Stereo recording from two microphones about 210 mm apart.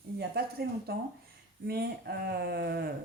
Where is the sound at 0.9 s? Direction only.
50° right (ahead or behind).